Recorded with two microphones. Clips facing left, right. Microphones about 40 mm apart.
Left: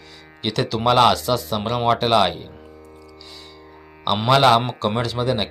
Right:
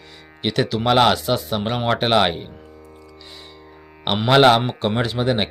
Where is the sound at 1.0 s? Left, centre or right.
Centre.